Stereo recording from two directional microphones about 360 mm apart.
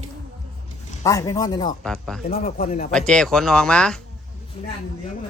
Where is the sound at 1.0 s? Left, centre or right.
Centre.